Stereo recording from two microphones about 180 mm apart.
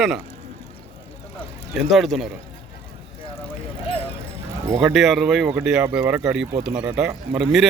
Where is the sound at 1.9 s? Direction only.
Centre (ahead or behind).